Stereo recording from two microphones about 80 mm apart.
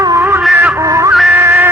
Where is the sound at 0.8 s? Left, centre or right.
Right.